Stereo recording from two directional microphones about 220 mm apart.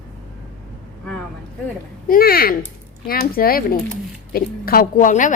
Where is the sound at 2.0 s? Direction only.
40° left (ahead or behind).